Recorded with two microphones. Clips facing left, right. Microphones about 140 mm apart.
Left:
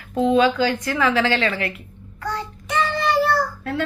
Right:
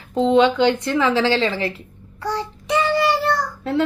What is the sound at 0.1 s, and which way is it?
A woman's voice, 25° right (ahead or behind).